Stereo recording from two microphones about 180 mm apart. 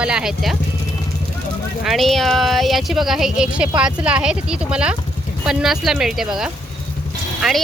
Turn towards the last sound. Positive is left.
turn(degrees=0)  # may be behind; listen again after turning